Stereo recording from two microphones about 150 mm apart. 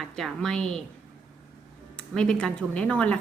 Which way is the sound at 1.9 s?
5° left (ahead or behind).